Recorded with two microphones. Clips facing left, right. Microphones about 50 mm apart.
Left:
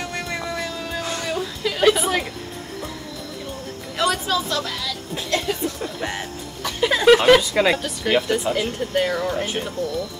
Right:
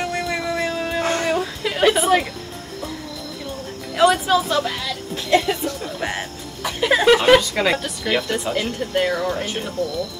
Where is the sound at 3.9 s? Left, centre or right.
Centre.